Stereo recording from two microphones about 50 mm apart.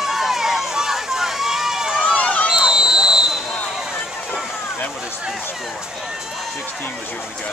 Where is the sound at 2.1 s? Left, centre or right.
Left.